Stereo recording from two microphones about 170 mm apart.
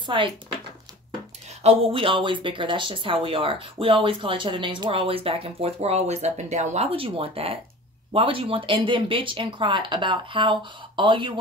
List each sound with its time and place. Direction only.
0.0 s speech: 30° right (ahead or behind)
1.6 s speech: 35° right (ahead or behind)